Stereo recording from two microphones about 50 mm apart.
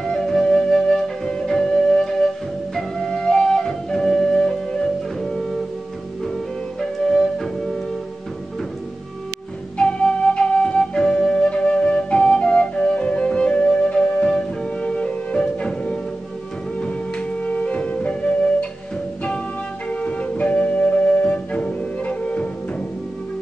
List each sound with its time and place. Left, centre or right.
0.0 s flute: centre
9.8 s flute: centre
16.8 s music: left
19.9 s music: left